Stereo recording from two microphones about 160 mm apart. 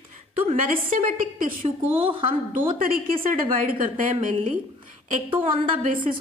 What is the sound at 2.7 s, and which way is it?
A woman's voice, 65° right (ahead or behind).